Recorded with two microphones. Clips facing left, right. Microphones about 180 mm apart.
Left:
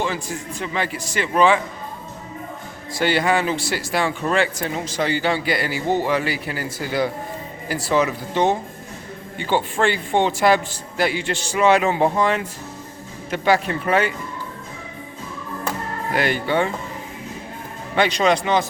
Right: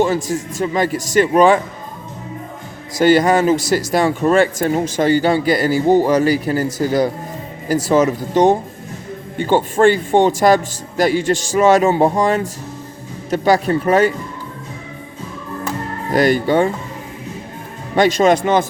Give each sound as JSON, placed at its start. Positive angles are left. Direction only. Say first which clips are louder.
{"t": 0.6, "sound": "speech", "louder": "right 8 dB", "side_deg": -40}
{"t": 2.9, "sound": "speech", "louder": "right 7 dB", "side_deg": -45}
{"t": 16.1, "sound": "speech", "louder": "right 7 dB", "side_deg": -40}
{"t": 17.9, "sound": "speech", "louder": "right 5 dB", "side_deg": -45}